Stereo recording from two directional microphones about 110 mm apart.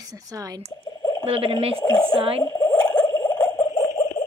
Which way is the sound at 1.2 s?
60° right (ahead or behind).